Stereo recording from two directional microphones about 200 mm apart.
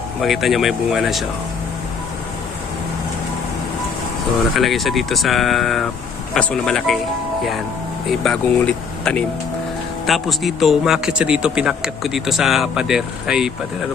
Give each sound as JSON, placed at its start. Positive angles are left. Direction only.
{"t": 0.2, "sound": "speech", "side_deg": 0}
{"t": 4.5, "sound": "speech", "side_deg": 0}
{"t": 8.2, "sound": "speech", "side_deg": 5}